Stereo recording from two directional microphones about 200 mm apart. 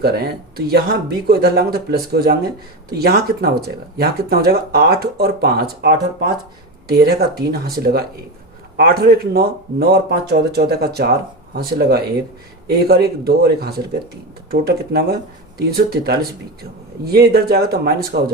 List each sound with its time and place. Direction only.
0.0 s speech: 50° right (ahead or behind)